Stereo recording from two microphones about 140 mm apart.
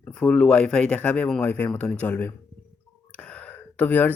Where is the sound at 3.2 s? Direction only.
10° left (ahead or behind).